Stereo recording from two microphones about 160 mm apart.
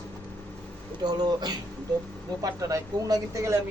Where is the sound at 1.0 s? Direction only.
25° right (ahead or behind).